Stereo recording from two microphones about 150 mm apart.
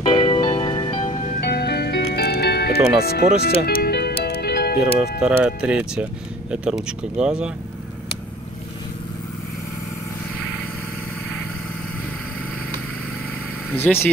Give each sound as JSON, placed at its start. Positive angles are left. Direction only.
{"t": 0.0, "sound": "music", "side_deg": 35}
{"t": 1.4, "sound": "music", "side_deg": 90}
{"t": 3.0, "sound": "speech", "side_deg": 90}
{"t": 3.6, "sound": "music", "side_deg": 90}
{"t": 5.2, "sound": "speech", "side_deg": -5}
{"t": 13.7, "sound": "speech", "side_deg": 10}